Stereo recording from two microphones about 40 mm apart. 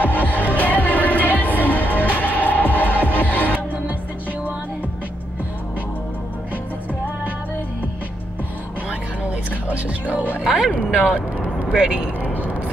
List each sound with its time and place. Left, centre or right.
0.0 s music: left
9.7 s music: right
10.4 s music: centre
11.7 s speech: right